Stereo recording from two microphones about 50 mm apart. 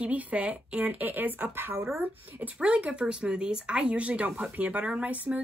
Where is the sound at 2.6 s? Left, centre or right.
Right.